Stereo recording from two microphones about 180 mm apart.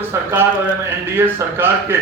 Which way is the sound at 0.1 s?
15° right (ahead or behind).